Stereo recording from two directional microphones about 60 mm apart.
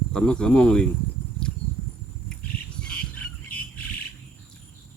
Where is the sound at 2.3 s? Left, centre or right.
Centre.